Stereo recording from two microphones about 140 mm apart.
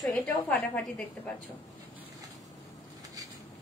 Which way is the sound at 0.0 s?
Centre (ahead or behind).